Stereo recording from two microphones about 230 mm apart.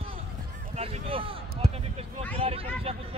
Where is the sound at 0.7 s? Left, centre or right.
Right.